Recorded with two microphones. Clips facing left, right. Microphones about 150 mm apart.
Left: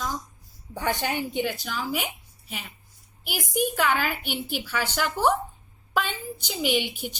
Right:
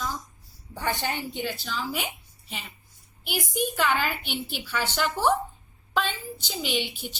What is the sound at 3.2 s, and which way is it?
Speech, 5° left (ahead or behind).